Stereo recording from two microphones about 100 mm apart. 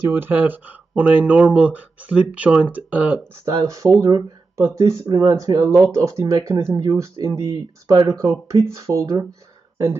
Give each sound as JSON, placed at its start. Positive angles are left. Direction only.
{"t": 0.1, "sound": "speech", "side_deg": -20}
{"t": 3.4, "sound": "speech", "side_deg": -30}